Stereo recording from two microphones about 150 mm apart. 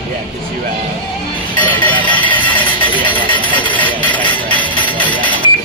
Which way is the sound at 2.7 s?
35° left (ahead or behind).